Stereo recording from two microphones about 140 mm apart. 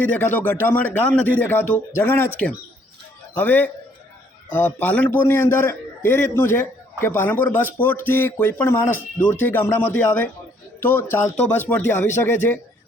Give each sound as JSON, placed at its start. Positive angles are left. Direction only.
{"t": 0.0, "sound": "a man's voice", "side_deg": 10}